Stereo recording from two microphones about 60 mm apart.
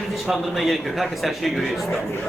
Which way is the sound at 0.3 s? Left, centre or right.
Centre.